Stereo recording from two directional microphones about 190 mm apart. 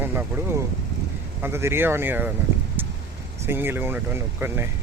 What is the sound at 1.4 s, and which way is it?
Speech, 10° right (ahead or behind).